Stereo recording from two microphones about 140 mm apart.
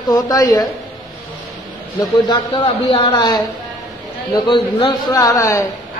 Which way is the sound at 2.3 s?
40° left (ahead or behind).